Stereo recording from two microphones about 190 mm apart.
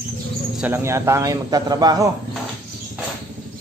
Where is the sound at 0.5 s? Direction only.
10° right (ahead or behind).